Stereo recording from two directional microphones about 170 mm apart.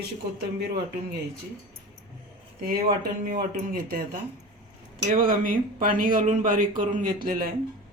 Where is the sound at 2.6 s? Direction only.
60° right (ahead or behind).